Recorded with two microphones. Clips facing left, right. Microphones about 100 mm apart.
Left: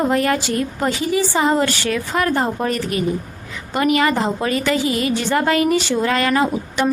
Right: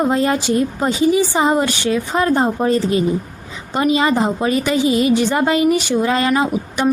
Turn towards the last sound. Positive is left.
turn(degrees=-15)  # may be behind; listen again after turning